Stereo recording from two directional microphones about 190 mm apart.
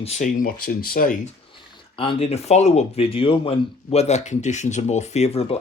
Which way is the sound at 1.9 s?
30° left (ahead or behind).